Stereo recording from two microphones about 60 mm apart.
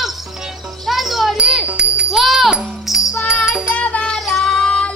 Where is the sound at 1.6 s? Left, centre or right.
Centre.